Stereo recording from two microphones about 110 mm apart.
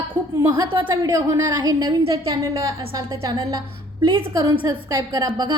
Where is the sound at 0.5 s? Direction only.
45° right (ahead or behind).